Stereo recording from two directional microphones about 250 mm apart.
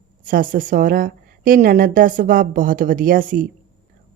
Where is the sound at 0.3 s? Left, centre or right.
Right.